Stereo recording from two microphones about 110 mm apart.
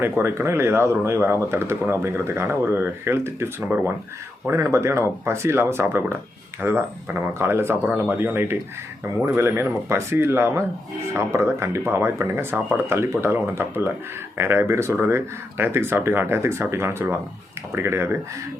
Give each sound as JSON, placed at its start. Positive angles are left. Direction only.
{"t": 0.0, "sound": "speech", "side_deg": -20}